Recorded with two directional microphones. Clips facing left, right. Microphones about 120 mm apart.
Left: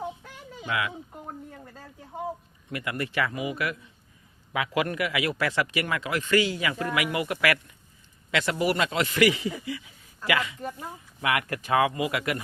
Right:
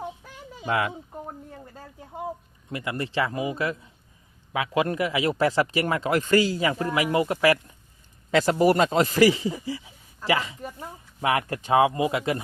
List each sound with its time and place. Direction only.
0.6 s speech: 40° right (ahead or behind)
2.6 s speech: 30° right (ahead or behind)